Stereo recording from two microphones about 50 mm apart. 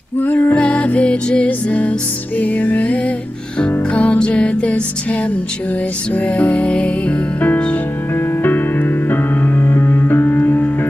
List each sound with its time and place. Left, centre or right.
0.2 s music: left
0.6 s music: left
6.1 s music: left
8.4 s music: left